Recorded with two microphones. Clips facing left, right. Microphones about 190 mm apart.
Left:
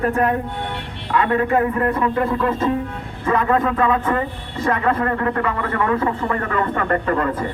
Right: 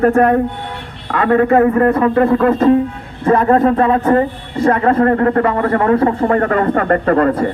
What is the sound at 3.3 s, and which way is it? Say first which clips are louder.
A man's voice: right 7 dB; 40° right (ahead or behind).